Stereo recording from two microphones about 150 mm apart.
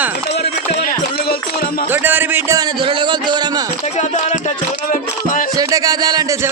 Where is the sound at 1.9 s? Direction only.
15° right (ahead or behind).